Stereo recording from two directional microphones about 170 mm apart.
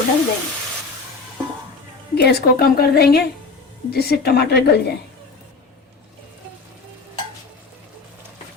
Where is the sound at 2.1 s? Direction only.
70° left (ahead or behind).